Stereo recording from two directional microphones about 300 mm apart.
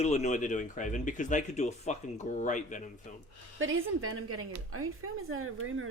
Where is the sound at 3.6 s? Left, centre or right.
Right.